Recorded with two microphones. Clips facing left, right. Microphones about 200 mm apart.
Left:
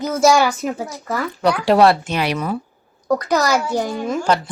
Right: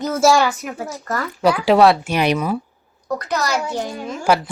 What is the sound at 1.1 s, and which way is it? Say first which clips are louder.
Speech: right 1 dB; centre (ahead or behind).